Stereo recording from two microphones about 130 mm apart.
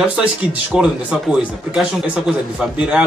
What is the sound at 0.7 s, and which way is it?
Speech, 5° right (ahead or behind).